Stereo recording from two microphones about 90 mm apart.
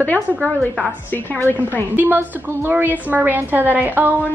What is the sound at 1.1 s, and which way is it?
Speech, 20° left (ahead or behind).